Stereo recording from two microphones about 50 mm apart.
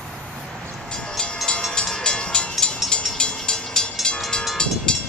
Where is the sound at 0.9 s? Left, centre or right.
Centre.